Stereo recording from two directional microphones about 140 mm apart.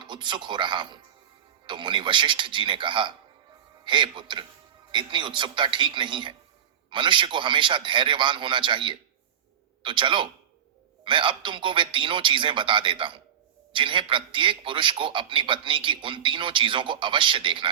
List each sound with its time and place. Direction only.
0.0 s a man's voice: 35° right (ahead or behind)